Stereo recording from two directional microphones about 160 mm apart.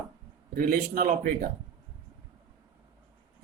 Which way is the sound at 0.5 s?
60° right (ahead or behind).